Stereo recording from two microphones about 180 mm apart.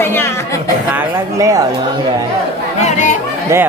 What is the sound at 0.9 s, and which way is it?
Speech, 10° right (ahead or behind).